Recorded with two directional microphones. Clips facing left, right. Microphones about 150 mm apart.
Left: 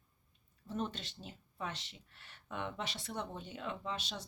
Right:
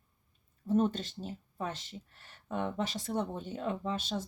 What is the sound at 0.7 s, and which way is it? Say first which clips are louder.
Speech: right 11 dB; 45° right (ahead or behind).